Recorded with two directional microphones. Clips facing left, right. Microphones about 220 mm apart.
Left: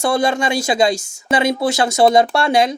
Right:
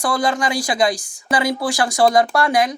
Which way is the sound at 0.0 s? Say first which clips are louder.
Left 3 dB; 25° left (ahead or behind).